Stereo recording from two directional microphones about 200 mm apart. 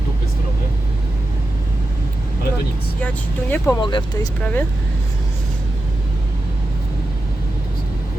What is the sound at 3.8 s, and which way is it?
Speech, 25° left (ahead or behind).